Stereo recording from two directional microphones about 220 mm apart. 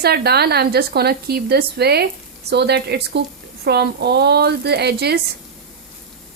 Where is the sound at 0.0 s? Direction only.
45° right (ahead or behind).